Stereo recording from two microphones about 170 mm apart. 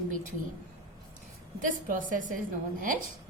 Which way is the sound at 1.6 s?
50° right (ahead or behind).